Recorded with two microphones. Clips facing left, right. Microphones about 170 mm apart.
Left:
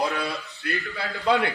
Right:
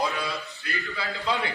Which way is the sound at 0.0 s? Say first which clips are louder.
Left 2 dB; 65° left (ahead or behind).